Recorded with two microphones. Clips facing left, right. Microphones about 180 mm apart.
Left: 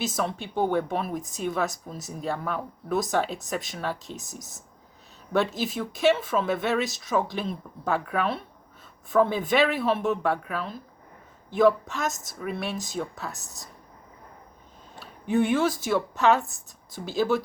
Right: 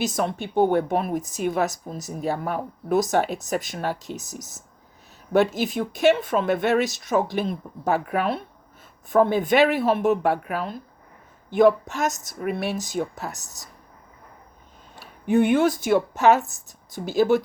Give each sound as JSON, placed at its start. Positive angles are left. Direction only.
{"t": 0.0, "sound": "speech", "side_deg": 0}
{"t": 0.4, "sound": "speech", "side_deg": -70}
{"t": 0.9, "sound": "speech", "side_deg": 0}
{"t": 14.9, "sound": "speech", "side_deg": 0}